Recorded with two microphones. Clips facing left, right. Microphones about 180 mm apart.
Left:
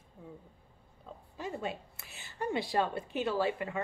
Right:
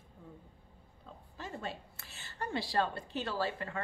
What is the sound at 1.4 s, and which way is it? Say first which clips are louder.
A woman's voice: left 4 dB; 15° left (ahead or behind).